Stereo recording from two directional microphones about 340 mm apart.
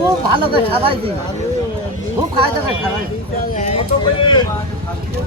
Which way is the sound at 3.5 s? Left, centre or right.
Centre.